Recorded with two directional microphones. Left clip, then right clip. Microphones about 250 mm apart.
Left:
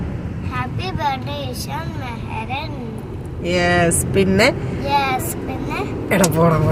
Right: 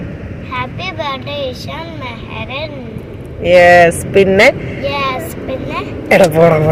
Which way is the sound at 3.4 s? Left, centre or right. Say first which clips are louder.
Right 12 dB; centre.